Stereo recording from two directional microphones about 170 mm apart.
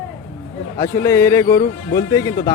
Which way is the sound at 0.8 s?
15° left (ahead or behind).